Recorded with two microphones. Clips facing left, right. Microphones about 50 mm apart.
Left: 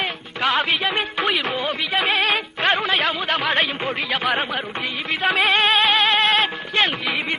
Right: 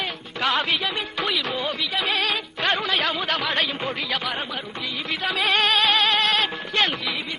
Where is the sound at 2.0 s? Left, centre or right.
Left.